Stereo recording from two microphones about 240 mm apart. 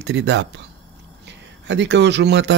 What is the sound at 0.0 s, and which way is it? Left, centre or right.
Speech, right.